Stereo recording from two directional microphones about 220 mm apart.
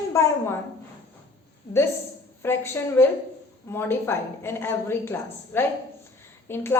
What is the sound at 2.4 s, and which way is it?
A woman's voice, 10° left (ahead or behind).